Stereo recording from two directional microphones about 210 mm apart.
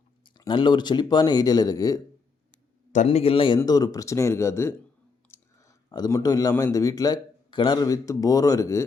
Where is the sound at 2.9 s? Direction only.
35° left (ahead or behind); by 8.9 s 15° left (ahead or behind).